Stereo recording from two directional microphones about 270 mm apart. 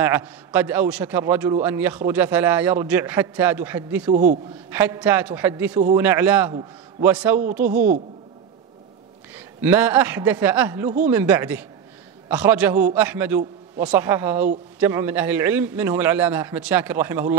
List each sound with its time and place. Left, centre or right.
0.0 s a man's voice: centre
4.1 s a man's voice: right
4.6 s a man's voice: centre
6.5 s a man's voice: centre
7.1 s a man's voice: centre
7.6 s a man's voice: right
9.3 s a man's voice: centre